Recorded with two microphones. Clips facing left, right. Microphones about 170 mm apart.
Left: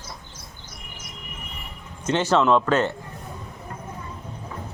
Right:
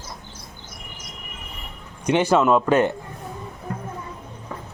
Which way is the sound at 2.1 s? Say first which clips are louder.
Right 2 dB; 15° right (ahead or behind).